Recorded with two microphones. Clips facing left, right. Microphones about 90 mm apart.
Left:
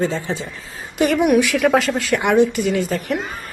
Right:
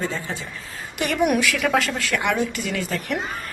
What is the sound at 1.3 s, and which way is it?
A woman's voice, 25° left (ahead or behind).